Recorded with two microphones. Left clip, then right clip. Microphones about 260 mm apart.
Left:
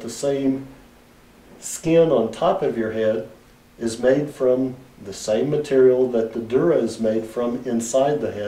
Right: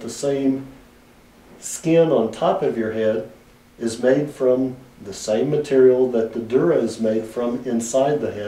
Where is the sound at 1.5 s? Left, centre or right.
Centre.